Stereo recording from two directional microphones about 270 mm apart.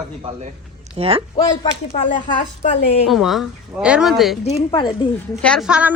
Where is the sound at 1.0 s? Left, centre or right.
Right.